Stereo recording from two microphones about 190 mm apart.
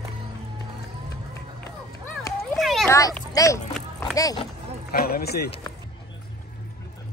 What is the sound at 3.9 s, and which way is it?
Speech, 20° left (ahead or behind).